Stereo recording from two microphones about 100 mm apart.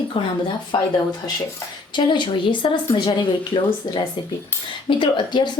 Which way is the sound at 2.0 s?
55° left (ahead or behind).